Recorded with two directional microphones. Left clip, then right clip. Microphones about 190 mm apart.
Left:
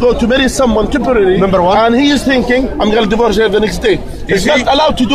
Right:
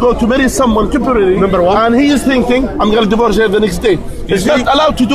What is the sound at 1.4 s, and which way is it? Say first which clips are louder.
Speech: even; 50° left (ahead or behind).